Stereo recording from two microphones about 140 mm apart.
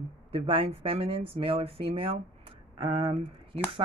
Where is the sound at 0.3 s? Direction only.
45° right (ahead or behind).